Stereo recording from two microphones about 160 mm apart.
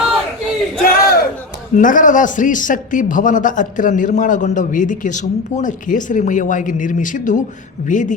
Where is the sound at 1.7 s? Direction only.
55° left (ahead or behind).